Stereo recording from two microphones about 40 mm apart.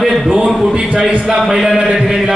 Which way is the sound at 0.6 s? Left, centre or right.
Centre.